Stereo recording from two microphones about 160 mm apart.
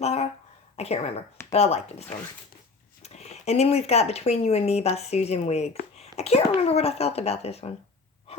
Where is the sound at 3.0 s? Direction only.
45° left (ahead or behind).